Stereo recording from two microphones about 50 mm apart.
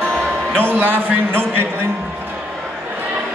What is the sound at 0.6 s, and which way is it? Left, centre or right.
Speech, right.